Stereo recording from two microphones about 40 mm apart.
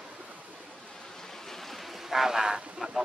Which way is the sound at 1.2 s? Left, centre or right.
Centre.